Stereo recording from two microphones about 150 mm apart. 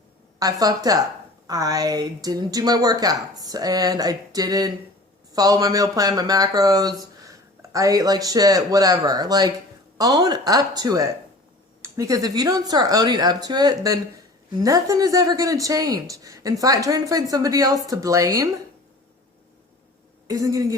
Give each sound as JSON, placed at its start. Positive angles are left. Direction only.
{"t": 0.6, "sound": "a woman's voice", "side_deg": -25}
{"t": 20.2, "sound": "a woman's voice", "side_deg": -25}